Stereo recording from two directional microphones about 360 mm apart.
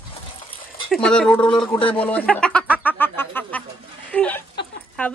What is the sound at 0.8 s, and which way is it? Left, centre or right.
Speech, centre.